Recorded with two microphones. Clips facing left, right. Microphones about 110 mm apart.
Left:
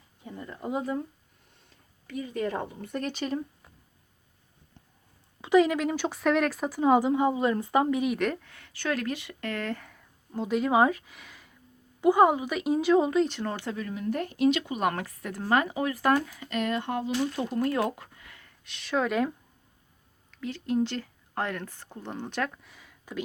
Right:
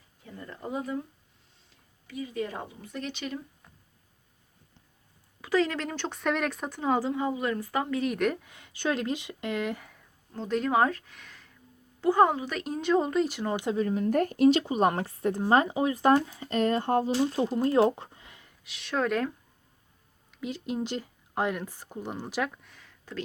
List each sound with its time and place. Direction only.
0.2 s speech: 20° left (ahead or behind)
2.3 s speech: 55° left (ahead or behind)
5.4 s speech: 15° left (ahead or behind)
7.2 s a woman's voice: 25° left (ahead or behind)
8.0 s a woman's voice: centre (ahead or behind)
8.4 s speech: 20° right (ahead or behind)
10.3 s a woman's voice: 5° left (ahead or behind); by 13.7 s 15° right (ahead or behind)
13.7 s speech: 35° right (ahead or behind)
18.6 s a woman's voice: centre (ahead or behind)
20.3 s speech: 15° right (ahead or behind)
22.7 s a sound: 10° left (ahead or behind)